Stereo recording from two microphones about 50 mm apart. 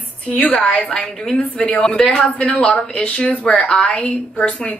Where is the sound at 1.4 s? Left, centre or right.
Left.